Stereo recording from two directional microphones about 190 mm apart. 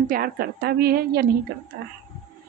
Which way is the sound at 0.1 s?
50° right (ahead or behind).